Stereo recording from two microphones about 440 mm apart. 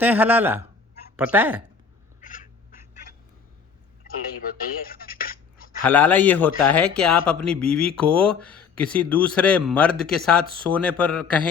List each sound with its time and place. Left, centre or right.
0.0 s speech: centre
2.2 s cat: centre
4.0 s a sound: centre
5.8 s speech: centre